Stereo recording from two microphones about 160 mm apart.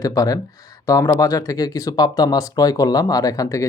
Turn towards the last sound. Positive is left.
turn(degrees=20)  # may be behind; listen again after turning